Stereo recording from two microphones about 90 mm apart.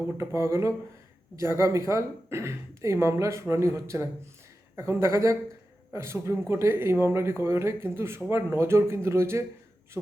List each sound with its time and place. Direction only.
0.3 s speech: 30° right (ahead or behind)